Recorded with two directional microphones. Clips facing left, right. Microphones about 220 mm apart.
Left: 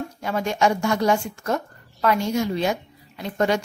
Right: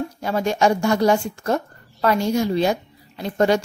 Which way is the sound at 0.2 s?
35° right (ahead or behind).